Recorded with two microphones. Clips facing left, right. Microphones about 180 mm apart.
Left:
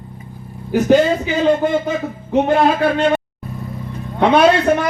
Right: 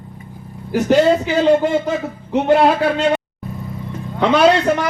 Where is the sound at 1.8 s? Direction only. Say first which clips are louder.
Even; 70° right (ahead or behind).